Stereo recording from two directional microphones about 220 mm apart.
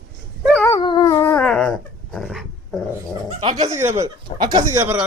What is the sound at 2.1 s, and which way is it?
Speech, centre (ahead or behind).